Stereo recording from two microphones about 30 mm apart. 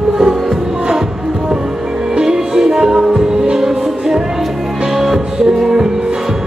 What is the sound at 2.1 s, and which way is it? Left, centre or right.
Music, centre.